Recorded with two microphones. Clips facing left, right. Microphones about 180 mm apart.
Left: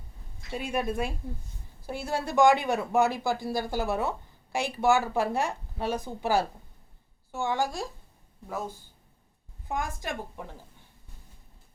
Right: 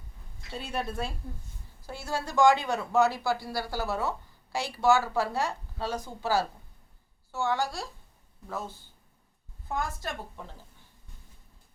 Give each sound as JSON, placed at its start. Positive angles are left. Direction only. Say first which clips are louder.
{"t": 0.5, "sound": "a woman's voice", "louder": "left 4 dB", "side_deg": 10}